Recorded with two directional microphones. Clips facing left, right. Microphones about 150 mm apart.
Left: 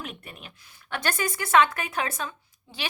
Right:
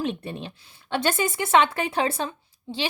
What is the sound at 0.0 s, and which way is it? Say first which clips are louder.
A woman's voice: right 11 dB; 30° right (ahead or behind).